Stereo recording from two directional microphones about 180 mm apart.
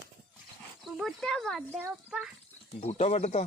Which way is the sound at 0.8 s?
Centre (ahead or behind).